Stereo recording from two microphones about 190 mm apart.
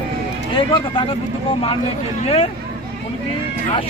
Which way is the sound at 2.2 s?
30° left (ahead or behind).